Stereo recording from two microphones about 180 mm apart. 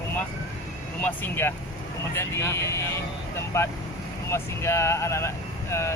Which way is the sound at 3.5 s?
15° left (ahead or behind).